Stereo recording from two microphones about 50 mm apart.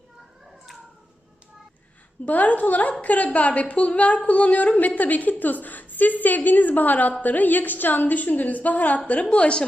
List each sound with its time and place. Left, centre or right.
2.2 s a woman's voice: left